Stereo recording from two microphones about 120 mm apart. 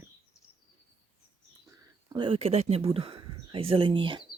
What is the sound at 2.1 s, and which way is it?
Speech, 45° right (ahead or behind).